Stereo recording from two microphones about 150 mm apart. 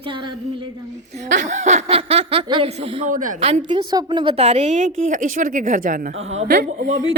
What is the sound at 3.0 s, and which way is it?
Speech, 60° right (ahead or behind).